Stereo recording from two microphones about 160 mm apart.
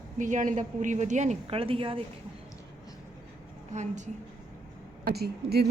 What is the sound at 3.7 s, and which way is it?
Speech, 50° right (ahead or behind).